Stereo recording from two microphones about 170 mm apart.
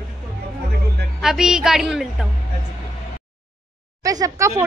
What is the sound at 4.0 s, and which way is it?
Speech, 20° right (ahead or behind).